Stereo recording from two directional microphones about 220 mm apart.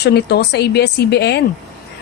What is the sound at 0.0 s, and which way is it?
A woman's voice, 50° left (ahead or behind).